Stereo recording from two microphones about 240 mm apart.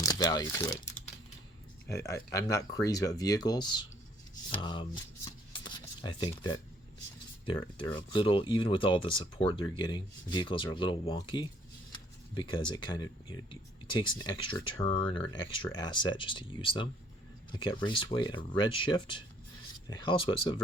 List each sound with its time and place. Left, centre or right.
0.0 s speech: centre
1.9 s speech: centre